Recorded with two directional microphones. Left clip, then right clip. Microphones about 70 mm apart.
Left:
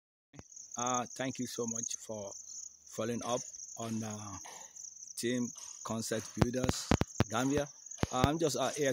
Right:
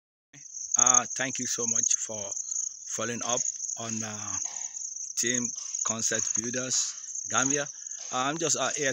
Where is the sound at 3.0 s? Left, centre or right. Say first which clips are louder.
Right 5 dB; centre.